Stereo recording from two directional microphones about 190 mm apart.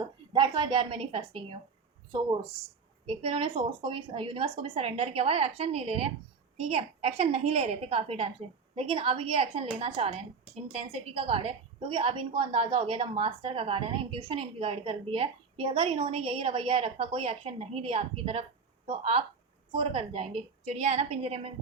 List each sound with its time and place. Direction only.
0.3 s a woman's voice: 25° right (ahead or behind)
3.1 s a woman's voice: 30° right (ahead or behind)